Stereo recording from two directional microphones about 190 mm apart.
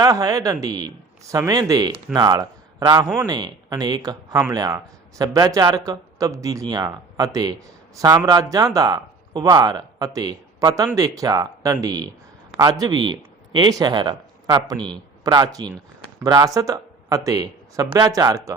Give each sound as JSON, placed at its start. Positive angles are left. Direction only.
{"t": 0.0, "sound": "a man's voice", "side_deg": -20}
{"t": 14.8, "sound": "a man's voice", "side_deg": 5}
{"t": 15.2, "sound": "speech", "side_deg": -20}